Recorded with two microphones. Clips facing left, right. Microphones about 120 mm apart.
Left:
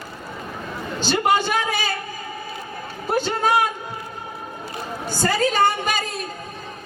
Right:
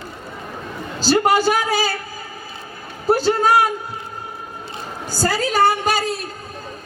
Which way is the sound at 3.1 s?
35° right (ahead or behind).